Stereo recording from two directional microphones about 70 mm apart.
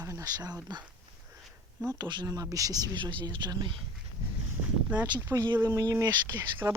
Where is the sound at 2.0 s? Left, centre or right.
Right.